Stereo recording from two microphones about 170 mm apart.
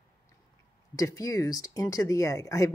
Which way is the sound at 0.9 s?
20° left (ahead or behind).